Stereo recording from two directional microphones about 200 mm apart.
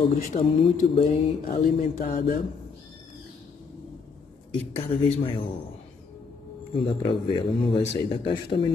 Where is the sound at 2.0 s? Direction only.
40° left (ahead or behind).